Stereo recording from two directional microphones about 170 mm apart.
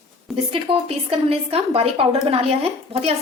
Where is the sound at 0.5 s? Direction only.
35° right (ahead or behind).